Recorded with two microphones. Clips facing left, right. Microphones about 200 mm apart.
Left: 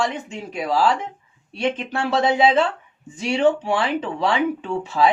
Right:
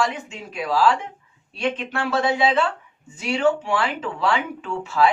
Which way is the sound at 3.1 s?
20° left (ahead or behind).